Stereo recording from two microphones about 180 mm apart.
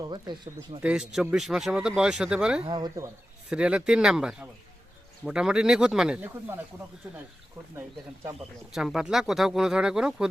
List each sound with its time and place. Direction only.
0.0 s speech: 25° right (ahead or behind)
0.8 s speech: 5° right (ahead or behind)
2.6 s speech: 25° right (ahead or behind)
3.5 s speech: 5° right (ahead or behind)